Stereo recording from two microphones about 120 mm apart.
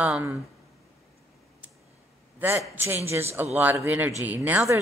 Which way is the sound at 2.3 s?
20° right (ahead or behind).